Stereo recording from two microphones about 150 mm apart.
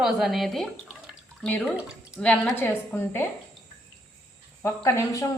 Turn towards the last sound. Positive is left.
turn(degrees=20)  # may be behind; listen again after turning